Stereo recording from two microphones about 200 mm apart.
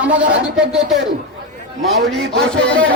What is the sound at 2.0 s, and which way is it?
Speech, centre (ahead or behind).